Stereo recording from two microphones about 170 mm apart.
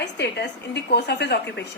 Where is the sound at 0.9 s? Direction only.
80° left.